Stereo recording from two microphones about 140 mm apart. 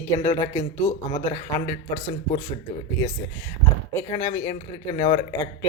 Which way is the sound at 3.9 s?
25° left (ahead or behind).